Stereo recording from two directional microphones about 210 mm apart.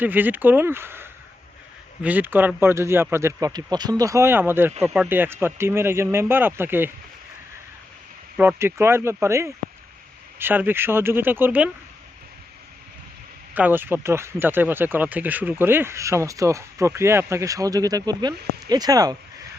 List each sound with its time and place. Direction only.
0.0 s speech: 10° right (ahead or behind)
8.4 s speech: 10° right (ahead or behind)
13.5 s speech: 10° right (ahead or behind)